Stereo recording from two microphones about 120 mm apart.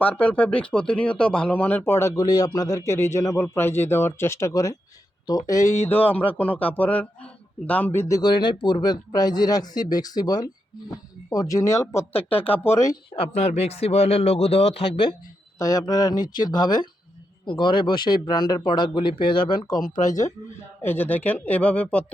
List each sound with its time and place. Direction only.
0.0 s speech: 10° left (ahead or behind); by 5.7 s 30° left (ahead or behind)
5.9 s speech: 15° left (ahead or behind)
8.3 s speech: 40° left (ahead or behind)
12.1 s speech: 55° left (ahead or behind)
12.5 s speech: 20° left (ahead or behind)
13.1 s a man's voice: 65° left (ahead or behind)
15.5 s speech: 30° left (ahead or behind)
20.8 s speech: 15° left (ahead or behind)